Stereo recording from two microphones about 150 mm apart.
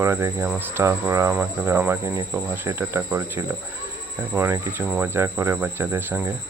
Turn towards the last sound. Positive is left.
turn(degrees=-15)  # may be behind; listen again after turning